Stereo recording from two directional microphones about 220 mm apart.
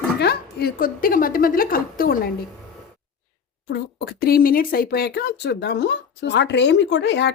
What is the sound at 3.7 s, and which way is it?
Speech, 45° left (ahead or behind).